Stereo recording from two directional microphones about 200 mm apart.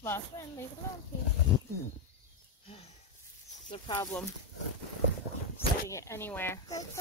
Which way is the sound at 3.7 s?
25° left (ahead or behind).